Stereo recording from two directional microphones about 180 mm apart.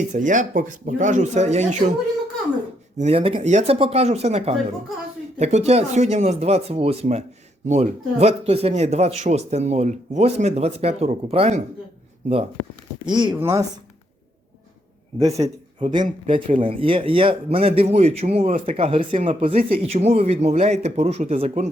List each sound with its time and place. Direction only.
0.1 s speech: 45° right (ahead or behind)
3.0 s speech: 35° right (ahead or behind)
13.1 s speech: 25° right (ahead or behind)
13.3 s speech: 15° right (ahead or behind)
15.2 s speech: 20° right (ahead or behind); by 21.7 s 40° right (ahead or behind)